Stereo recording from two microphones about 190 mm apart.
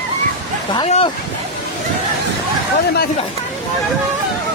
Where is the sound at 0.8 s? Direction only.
35° left (ahead or behind).